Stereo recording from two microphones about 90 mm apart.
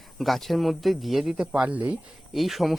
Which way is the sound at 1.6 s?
15° right (ahead or behind).